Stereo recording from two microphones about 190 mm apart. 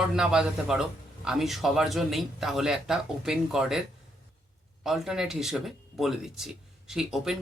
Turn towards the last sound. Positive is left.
turn(degrees=0)  # may be behind; listen again after turning